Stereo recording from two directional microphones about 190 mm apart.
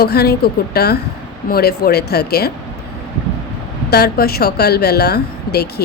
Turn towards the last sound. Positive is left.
turn(degrees=55)  # may be behind; listen again after turning